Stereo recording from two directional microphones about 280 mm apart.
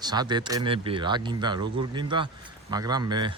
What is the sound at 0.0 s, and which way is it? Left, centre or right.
Speech, centre.